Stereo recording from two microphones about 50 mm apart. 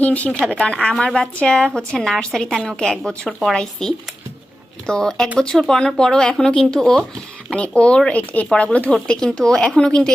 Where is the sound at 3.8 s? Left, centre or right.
Centre.